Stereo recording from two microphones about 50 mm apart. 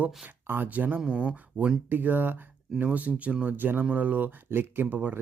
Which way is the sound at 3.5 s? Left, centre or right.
Right.